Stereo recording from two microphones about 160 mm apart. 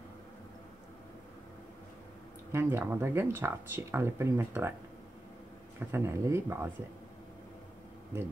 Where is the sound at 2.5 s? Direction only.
15° right (ahead or behind).